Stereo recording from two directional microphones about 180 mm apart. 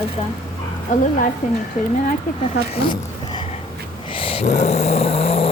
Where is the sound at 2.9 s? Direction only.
25° left (ahead or behind).